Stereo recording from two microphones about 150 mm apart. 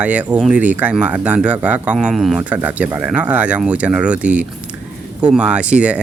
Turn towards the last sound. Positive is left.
turn(degrees=-10)  # may be behind; listen again after turning